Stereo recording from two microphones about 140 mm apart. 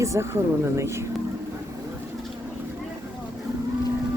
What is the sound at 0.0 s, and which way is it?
Speech, 20° right (ahead or behind).